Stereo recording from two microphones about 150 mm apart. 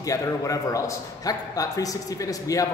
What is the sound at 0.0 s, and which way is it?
A man's voice, 25° left (ahead or behind).